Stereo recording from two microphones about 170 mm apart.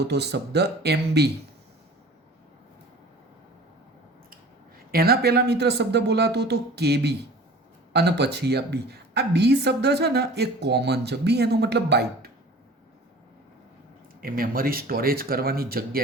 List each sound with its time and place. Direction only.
0.1 s a woman's voice: 80° right
4.9 s a woman's voice: 65° right (ahead or behind)
14.2 s speech: 55° right (ahead or behind)